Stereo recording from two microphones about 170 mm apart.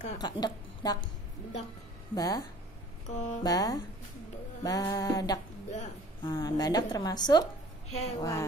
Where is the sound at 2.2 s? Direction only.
20° left (ahead or behind).